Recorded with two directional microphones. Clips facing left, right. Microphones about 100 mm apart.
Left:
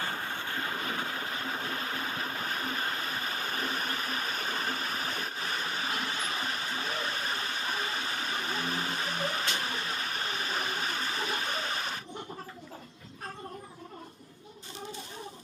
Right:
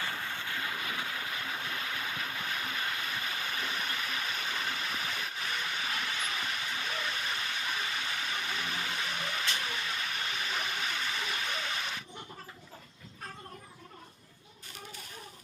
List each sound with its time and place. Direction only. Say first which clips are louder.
0.0 s train: left 2 dB; 40° left (ahead or behind)